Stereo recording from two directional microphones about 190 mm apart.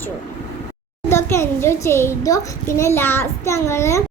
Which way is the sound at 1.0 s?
15° left (ahead or behind).